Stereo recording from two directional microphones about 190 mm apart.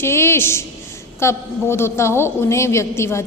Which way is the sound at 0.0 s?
15° left (ahead or behind).